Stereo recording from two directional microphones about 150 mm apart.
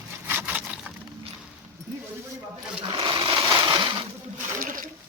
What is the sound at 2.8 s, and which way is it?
Sewing machine, 30° right (ahead or behind).